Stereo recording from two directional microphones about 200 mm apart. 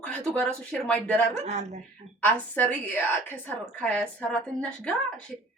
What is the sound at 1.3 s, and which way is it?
Speech, 35° right (ahead or behind).